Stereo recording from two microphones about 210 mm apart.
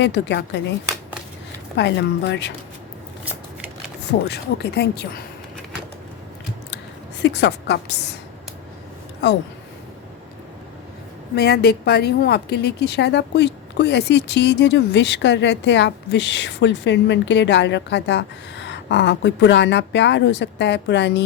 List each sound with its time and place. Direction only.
0.0 s a woman's voice: 55° left (ahead or behind)
1.7 s a woman's voice: 55° left (ahead or behind)
4.3 s speech: 50° left (ahead or behind)
7.2 s a woman's voice: 55° left (ahead or behind)
9.2 s a woman's voice: 55° left (ahead or behind)
11.3 s a woman's voice: 50° left (ahead or behind)